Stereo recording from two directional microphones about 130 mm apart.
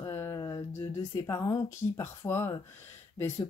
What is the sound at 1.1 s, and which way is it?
Speech, 25° left (ahead or behind).